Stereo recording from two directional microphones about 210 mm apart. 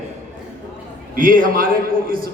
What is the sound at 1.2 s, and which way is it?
Speech, 40° right (ahead or behind).